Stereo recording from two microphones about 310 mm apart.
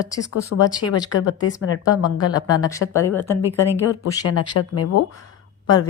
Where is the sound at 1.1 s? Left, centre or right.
Left.